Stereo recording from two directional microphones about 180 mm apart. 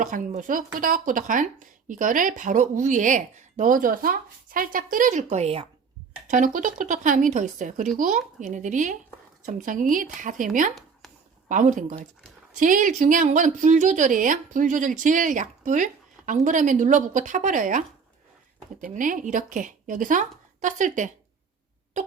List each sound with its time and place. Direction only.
0.0 s speech: 45° right (ahead or behind)
6.2 s speech: 45° right (ahead or behind)